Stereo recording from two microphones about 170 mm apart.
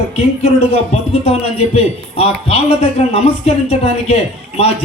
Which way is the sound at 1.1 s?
35° left (ahead or behind).